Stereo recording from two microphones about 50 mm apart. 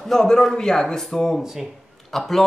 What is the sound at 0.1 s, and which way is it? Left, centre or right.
Speech, centre.